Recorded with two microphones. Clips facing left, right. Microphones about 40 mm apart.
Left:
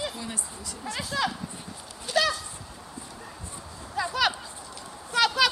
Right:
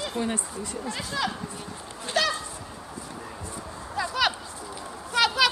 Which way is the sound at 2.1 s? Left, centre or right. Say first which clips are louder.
Left 1 dB; centre.